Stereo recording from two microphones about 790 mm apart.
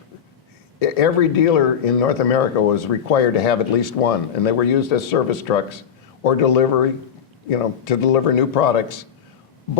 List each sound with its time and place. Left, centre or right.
0.8 s speech: left